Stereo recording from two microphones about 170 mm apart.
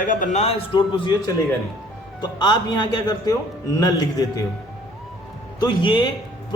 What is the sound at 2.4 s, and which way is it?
A man's voice, 25° left (ahead or behind).